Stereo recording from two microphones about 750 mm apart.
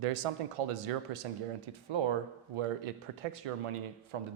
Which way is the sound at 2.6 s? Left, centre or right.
Right.